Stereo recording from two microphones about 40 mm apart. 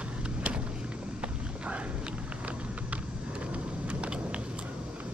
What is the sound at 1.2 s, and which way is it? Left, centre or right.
Walk, right.